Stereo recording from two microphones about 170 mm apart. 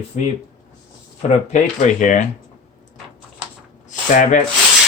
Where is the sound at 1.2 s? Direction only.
45° left (ahead or behind).